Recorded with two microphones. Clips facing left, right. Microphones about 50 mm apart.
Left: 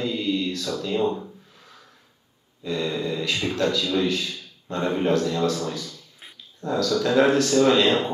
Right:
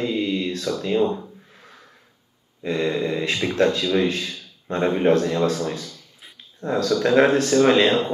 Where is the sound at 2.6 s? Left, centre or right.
Right.